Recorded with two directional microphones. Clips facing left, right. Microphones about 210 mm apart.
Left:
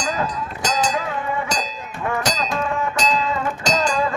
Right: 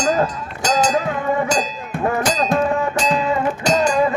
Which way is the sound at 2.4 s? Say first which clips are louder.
Right 6 dB; 55° right (ahead or behind).